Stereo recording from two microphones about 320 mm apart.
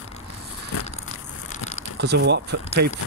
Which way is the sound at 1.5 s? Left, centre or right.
Left.